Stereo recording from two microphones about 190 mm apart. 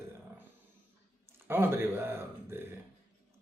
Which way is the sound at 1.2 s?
10° right (ahead or behind).